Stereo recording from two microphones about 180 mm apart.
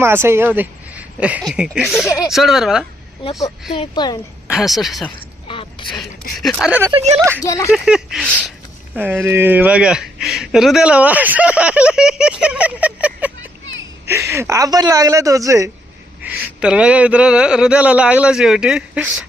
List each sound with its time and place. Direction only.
0.0 s speech: 15° right (ahead or behind)
3.7 s speech: 25° left (ahead or behind)
4.4 s speech: centre (ahead or behind)
5.5 s a sound: 30° left (ahead or behind)
6.4 s speech: centre (ahead or behind)
6.9 s speech: 35° right (ahead or behind)
7.2 s speech: 10° right (ahead or behind)
7.4 s speech: 15° left (ahead or behind)
7.7 s speech: 5° right (ahead or behind)
9.0 s speech: 10° right (ahead or behind)
12.4 s a sound: 5° right (ahead or behind)
14.1 s speech: 15° right (ahead or behind)
16.2 s speech: 5° right (ahead or behind)